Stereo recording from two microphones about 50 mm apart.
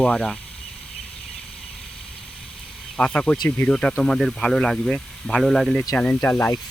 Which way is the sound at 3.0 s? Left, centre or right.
Left.